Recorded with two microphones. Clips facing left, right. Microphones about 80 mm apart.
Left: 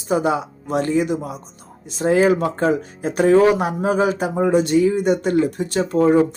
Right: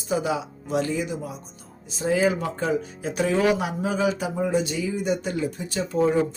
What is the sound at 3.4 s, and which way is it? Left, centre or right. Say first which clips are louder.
Speech: left 6 dB; left.